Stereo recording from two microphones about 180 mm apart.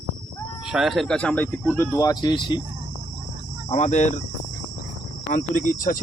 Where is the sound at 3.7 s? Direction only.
40° left (ahead or behind).